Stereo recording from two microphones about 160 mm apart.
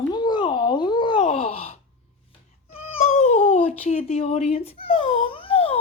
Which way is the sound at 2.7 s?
40° left (ahead or behind).